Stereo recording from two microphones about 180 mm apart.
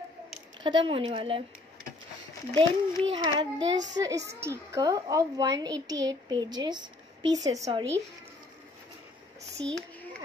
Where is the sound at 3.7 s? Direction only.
80° right.